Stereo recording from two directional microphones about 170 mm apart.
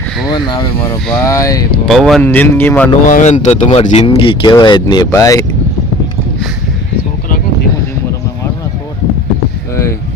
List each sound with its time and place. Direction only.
0.3 s speech: 25° left (ahead or behind)
1.9 s speech: centre (ahead or behind)
2.2 s speech: 10° left (ahead or behind)
3.1 s speech: 45° left (ahead or behind)
3.6 s speech: 35° left (ahead or behind); by 5.5 s 20° left (ahead or behind)